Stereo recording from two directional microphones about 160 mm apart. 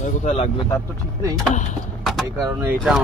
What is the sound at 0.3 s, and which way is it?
Speech, 35° left (ahead or behind).